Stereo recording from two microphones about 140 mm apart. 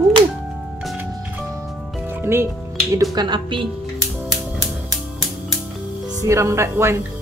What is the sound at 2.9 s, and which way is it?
Speech, 25° right (ahead or behind).